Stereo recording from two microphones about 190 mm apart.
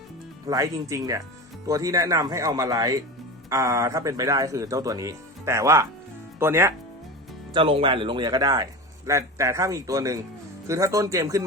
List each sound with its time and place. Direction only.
0.4 s speech: 15° right (ahead or behind)
7.5 s speech: 25° right (ahead or behind)